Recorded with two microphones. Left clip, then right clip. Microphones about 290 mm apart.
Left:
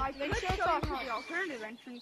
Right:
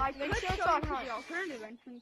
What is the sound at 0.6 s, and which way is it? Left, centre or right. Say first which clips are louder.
Speech: right 2 dB; centre.